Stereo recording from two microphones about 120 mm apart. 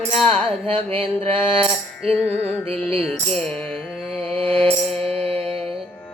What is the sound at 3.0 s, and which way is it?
Music, 5° left (ahead or behind).